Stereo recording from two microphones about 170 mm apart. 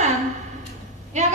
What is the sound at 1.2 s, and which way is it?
Speech, 45° right (ahead or behind).